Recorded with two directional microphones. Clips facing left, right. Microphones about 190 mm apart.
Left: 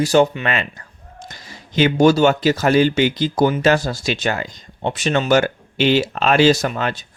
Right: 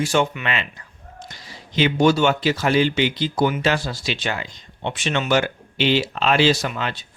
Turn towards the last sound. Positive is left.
turn(degrees=45)  # may be behind; listen again after turning